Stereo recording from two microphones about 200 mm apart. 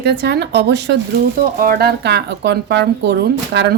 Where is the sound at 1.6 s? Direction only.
50° right (ahead or behind).